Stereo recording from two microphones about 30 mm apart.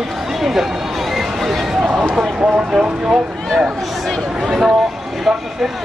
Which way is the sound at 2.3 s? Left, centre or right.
Right.